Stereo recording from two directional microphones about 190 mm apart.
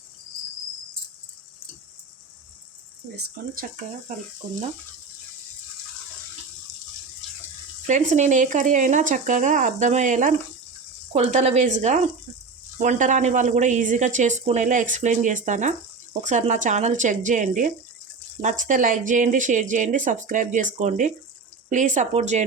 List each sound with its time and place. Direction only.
7.9 s a woman's voice: 40° right (ahead or behind)